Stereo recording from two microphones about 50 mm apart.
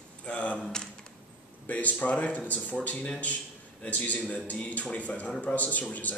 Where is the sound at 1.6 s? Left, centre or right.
Left.